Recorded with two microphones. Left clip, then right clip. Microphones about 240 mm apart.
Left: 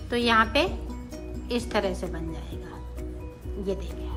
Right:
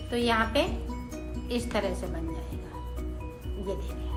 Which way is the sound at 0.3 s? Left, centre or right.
Centre.